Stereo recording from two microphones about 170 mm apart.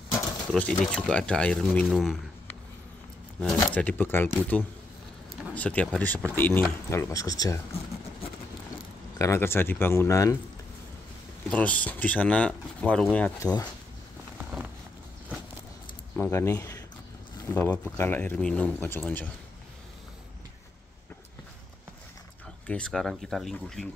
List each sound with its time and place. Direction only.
0.1 s pigeon: 15° left (ahead or behind)
0.5 s speech: 10° left (ahead or behind)
3.3 s speech: centre (ahead or behind); by 7.6 s 20° left (ahead or behind)
9.2 s speech: 15° left (ahead or behind)
11.5 s speech: 10° left (ahead or behind)
16.2 s speech: 15° left (ahead or behind)
22.7 s speech: 5° left (ahead or behind)